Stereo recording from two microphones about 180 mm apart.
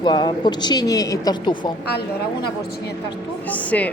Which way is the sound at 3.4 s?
10° left (ahead or behind).